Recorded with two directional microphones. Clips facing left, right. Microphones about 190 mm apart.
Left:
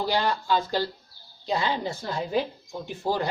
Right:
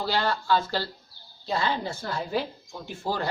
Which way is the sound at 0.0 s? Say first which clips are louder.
Left 1 dB; 15° left (ahead or behind).